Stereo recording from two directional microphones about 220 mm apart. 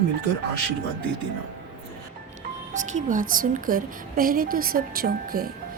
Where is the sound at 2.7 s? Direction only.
35° right (ahead or behind).